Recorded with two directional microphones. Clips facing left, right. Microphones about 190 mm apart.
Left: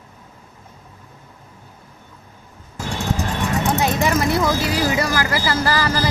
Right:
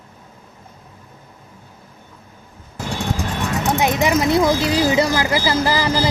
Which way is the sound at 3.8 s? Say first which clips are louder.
Right 4 dB; 15° right (ahead or behind).